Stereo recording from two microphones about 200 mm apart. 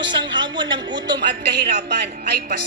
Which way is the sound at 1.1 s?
55° right (ahead or behind).